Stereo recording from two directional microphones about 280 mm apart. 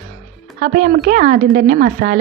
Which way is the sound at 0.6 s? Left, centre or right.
Right.